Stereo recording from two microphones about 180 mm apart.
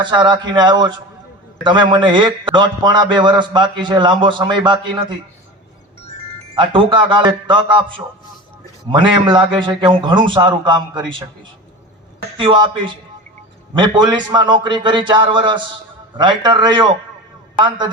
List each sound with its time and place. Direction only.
0.0 s a man's voice: 25° right (ahead or behind)
6.6 s a man's voice: 25° right (ahead or behind)
12.4 s a man's voice: 30° right (ahead or behind)